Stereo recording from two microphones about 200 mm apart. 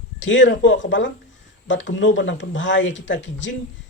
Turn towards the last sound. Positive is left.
turn(degrees=65)  # may be behind; listen again after turning